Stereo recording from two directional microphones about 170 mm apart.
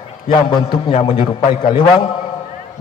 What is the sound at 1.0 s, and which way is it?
A man's voice, 25° left (ahead or behind).